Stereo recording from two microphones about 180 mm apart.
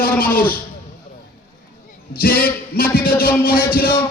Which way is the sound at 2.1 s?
55° left (ahead or behind).